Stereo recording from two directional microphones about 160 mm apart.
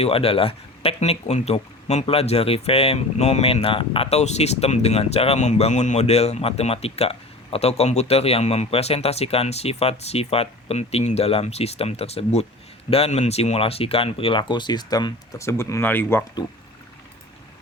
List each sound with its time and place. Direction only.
0.0 s speech: 35° left (ahead or behind); by 16.2 s 15° left (ahead or behind)